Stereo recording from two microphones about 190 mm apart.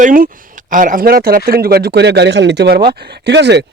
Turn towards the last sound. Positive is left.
turn(degrees=-65)  # may be behind; listen again after turning